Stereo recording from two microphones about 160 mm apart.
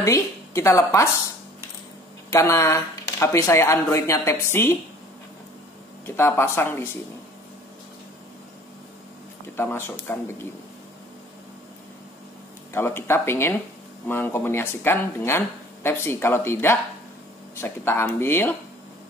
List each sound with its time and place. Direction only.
0.0 s a woman's voice: 20° left (ahead or behind)
2.3 s speech: 20° left (ahead or behind)
6.0 s speech: 15° left (ahead or behind)
9.6 s speech: 15° left (ahead or behind)
12.7 s speech: 15° left (ahead or behind)